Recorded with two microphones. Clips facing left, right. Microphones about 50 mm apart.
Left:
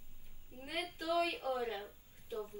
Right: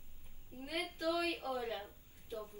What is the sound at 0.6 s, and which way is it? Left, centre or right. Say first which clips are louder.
A woman's voice: right 1 dB; left.